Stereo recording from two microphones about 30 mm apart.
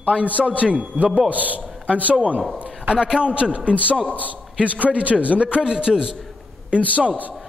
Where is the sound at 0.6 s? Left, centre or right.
Right.